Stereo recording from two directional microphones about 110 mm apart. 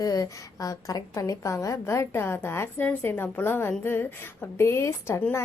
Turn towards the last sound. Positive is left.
turn(degrees=25)  # may be behind; listen again after turning